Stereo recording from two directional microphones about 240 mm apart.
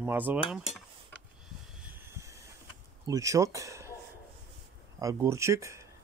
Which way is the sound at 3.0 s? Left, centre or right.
Centre.